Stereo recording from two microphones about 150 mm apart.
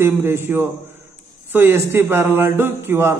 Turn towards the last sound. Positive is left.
turn(degrees=-15)  # may be behind; listen again after turning